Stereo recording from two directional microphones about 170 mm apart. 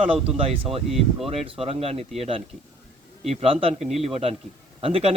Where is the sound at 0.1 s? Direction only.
35° right (ahead or behind).